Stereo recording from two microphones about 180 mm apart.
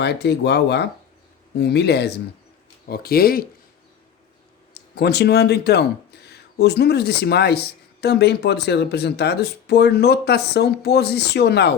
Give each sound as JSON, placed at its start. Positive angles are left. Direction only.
{"t": 0.0, "sound": "speech", "side_deg": 70}
{"t": 4.7, "sound": "speech", "side_deg": 65}